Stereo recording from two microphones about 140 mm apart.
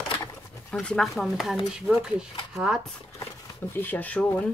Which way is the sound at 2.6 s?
5° right (ahead or behind).